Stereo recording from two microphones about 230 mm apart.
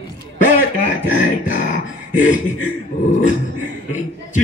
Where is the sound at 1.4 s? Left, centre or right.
Left.